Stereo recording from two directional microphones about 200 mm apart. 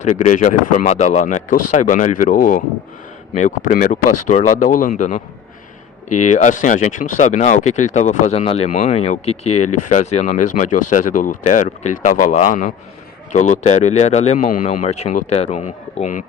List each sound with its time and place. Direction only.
0.0 s speech: 35° left (ahead or behind)